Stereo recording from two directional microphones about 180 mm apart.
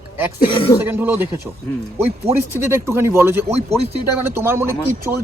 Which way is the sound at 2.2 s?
15° right (ahead or behind).